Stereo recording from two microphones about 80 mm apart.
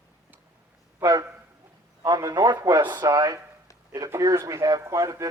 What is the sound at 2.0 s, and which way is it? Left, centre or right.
Speech, right.